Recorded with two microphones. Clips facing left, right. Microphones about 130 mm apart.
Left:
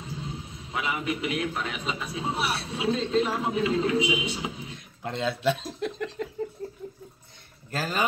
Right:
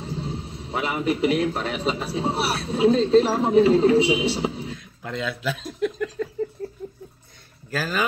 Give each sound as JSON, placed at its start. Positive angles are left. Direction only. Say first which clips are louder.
{"t": 0.0, "sound": "a man's voice", "louder": "right 6 dB", "side_deg": -30}
{"t": 4.7, "sound": "a sound", "louder": "right 1 dB", "side_deg": 25}
{"t": 7.7, "sound": "speech", "louder": "right 3 dB", "side_deg": 25}